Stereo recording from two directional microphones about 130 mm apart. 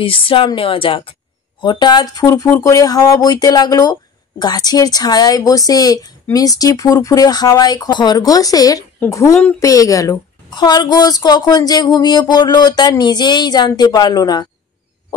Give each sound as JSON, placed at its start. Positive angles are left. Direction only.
{"t": 0.0, "sound": "a woman's voice", "side_deg": 45}